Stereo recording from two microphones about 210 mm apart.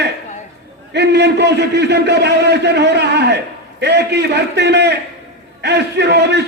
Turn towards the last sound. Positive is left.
turn(degrees=-55)  # may be behind; listen again after turning